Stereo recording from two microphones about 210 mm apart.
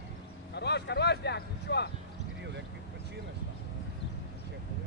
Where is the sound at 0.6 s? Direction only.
55° left (ahead or behind).